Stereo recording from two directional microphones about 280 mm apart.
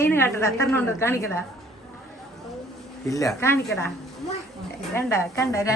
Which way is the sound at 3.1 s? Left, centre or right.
Centre.